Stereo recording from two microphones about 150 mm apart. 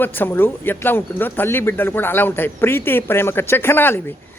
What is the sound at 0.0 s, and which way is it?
Speech, 15° left (ahead or behind).